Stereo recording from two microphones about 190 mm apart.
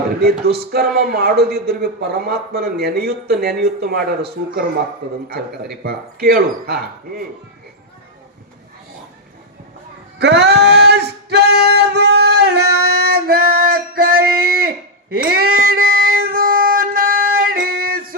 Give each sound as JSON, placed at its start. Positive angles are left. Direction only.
{"t": 0.2, "sound": "speech", "side_deg": -55}
{"t": 10.2, "sound": "music", "side_deg": -60}